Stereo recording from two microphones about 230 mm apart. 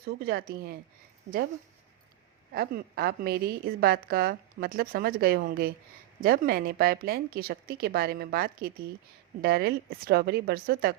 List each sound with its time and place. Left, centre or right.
0.0 s a woman's voice: right
1.3 s speech: right
2.5 s a woman's voice: right